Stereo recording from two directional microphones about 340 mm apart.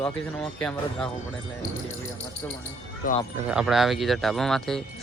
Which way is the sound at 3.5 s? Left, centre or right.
Centre.